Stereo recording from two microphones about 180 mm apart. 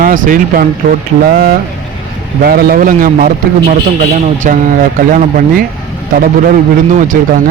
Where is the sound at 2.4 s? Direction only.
55° right (ahead or behind).